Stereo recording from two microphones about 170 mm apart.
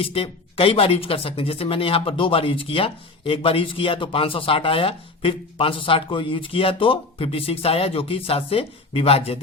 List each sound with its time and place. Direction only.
0.0 s speech: 35° left (ahead or behind)